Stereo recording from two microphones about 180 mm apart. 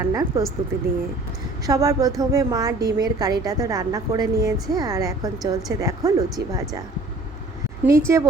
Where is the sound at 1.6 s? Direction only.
20° right (ahead or behind).